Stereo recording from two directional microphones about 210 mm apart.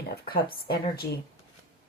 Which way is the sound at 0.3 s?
45° left (ahead or behind).